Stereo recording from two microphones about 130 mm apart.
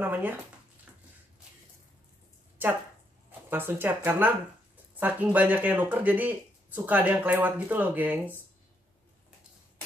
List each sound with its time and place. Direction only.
0.0 s speech: 15° right (ahead or behind)
2.6 s speech: 15° right (ahead or behind)